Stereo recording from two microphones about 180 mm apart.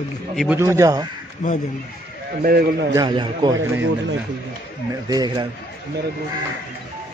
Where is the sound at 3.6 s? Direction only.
90° right.